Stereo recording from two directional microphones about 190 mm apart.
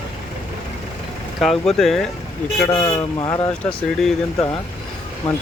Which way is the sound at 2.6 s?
20° left (ahead or behind).